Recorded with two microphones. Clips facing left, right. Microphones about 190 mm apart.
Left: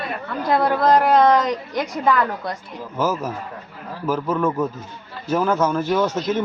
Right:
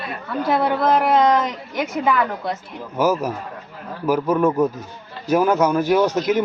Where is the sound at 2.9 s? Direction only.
15° right (ahead or behind).